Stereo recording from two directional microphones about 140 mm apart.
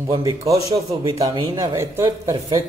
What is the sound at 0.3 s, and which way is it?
A man's voice, 25° right (ahead or behind).